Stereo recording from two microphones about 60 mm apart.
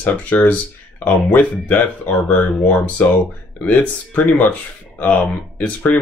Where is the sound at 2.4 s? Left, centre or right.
Left.